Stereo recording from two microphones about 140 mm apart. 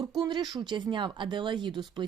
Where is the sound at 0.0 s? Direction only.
30° right (ahead or behind).